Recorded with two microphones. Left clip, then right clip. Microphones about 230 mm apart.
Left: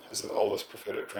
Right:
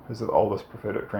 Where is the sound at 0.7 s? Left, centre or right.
Left.